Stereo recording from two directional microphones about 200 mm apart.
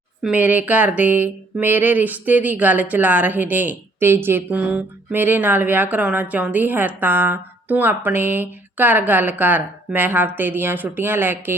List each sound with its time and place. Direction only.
0.2 s a woman's voice: 5° right (ahead or behind)